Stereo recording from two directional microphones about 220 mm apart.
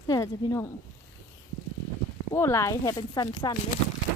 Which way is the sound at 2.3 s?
10° left (ahead or behind).